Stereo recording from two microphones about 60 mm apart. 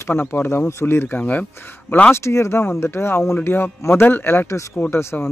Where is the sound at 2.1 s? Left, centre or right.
Left.